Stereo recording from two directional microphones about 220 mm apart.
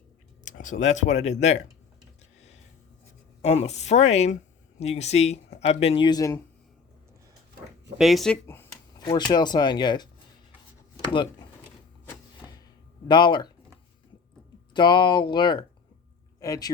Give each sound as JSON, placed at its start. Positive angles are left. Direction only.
{"t": 0.4, "sound": "speech", "side_deg": 35}
{"t": 3.4, "sound": "speech", "side_deg": 30}
{"t": 7.9, "sound": "a sound", "side_deg": 0}
{"t": 9.3, "sound": "speech", "side_deg": 20}
{"t": 11.1, "sound": "speech", "side_deg": 20}
{"t": 12.0, "sound": "vehicle", "side_deg": 15}
{"t": 13.1, "sound": "speech", "side_deg": 20}
{"t": 14.7, "sound": "speech", "side_deg": 20}